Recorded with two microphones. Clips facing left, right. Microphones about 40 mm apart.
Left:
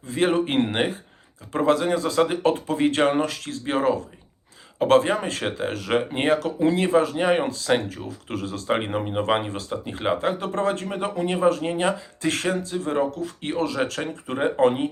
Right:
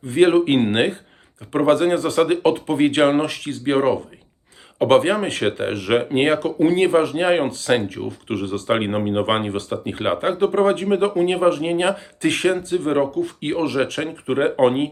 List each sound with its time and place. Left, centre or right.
0.1 s speech: right
8.0 s speech: right
12.4 s speech: centre